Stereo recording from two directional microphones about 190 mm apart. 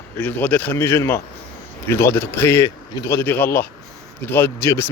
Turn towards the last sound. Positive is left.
turn(degrees=15)  # may be behind; listen again after turning